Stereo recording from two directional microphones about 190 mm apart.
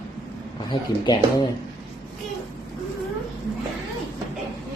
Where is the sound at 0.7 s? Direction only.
25° left (ahead or behind).